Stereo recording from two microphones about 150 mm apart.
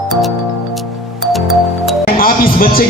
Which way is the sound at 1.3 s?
Centre (ahead or behind).